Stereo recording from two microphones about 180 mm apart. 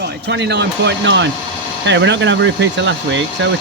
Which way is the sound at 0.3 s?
70° right (ahead or behind).